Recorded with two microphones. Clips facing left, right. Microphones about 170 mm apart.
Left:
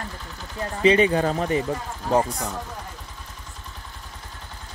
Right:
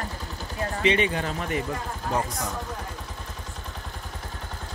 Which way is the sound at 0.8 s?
35° left (ahead or behind).